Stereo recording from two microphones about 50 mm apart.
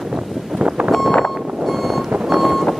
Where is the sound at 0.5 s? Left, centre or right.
Centre.